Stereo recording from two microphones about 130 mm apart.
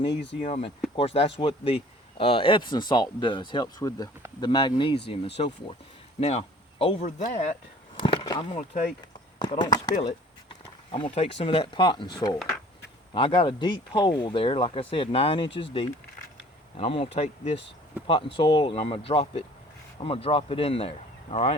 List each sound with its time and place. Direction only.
0.4 s speech: 50° left (ahead or behind)
6.1 s a sound: 50° left (ahead or behind)
7.0 s speech: 75° left (ahead or behind)
8.0 s a sound: 50° left (ahead or behind)
8.4 s speech: 55° left (ahead or behind)
9.5 s speech: 35° left (ahead or behind)
10.9 s speech: 45° left (ahead or behind)
18.0 s speech: 40° left (ahead or behind)